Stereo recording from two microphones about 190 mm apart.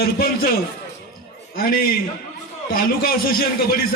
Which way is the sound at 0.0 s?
55° left (ahead or behind).